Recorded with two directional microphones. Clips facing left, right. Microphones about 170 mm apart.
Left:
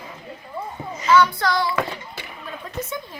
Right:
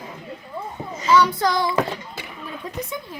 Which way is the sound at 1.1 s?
15° right (ahead or behind).